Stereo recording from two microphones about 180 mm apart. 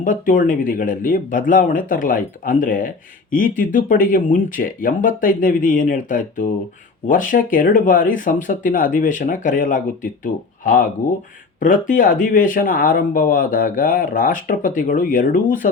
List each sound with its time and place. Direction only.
0.0 s speech: 45° left (ahead or behind)